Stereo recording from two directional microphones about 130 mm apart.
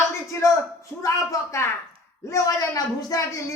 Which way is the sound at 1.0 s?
25° left (ahead or behind).